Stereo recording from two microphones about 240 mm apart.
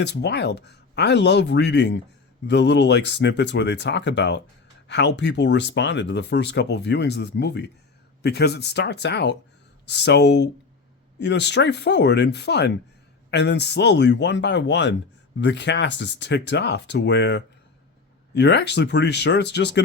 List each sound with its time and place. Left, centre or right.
0.0 s speech: left